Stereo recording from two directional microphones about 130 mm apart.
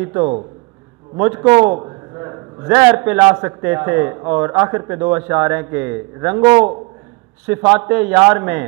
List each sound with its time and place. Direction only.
0.0 s a man's voice: 15° right (ahead or behind)